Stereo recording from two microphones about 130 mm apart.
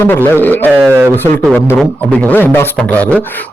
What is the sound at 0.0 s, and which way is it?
Speech, 15° left (ahead or behind).